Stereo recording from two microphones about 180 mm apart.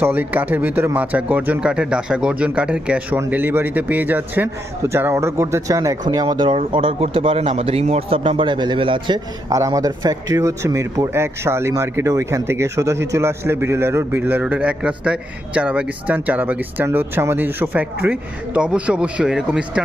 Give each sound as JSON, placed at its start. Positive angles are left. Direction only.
{"t": 0.0, "sound": "speech", "side_deg": -10}